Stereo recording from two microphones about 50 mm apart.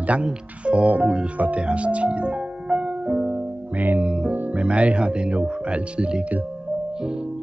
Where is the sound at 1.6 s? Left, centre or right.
Right.